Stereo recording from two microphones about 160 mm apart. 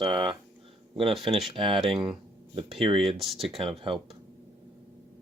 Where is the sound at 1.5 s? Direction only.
35° right (ahead or behind).